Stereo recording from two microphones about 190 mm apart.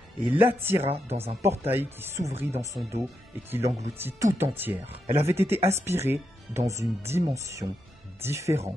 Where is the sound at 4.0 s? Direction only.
10° right (ahead or behind).